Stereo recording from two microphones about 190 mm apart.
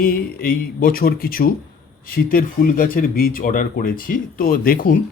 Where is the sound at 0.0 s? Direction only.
50° left (ahead or behind).